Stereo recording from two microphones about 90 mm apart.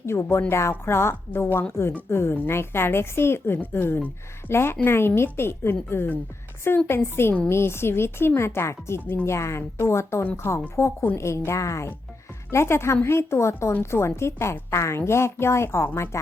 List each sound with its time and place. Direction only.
0.0 s a woman's voice: 30° left (ahead or behind)